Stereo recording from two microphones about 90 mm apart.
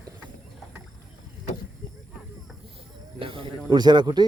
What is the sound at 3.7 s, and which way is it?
Speech, 50° right (ahead or behind).